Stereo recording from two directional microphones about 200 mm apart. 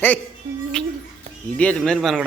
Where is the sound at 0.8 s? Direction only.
5° left (ahead or behind).